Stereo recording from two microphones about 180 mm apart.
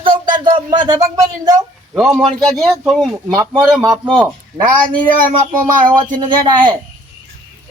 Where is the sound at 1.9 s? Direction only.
Centre (ahead or behind).